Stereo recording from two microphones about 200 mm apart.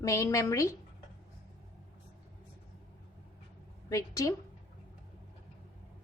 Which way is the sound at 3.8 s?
15° left (ahead or behind).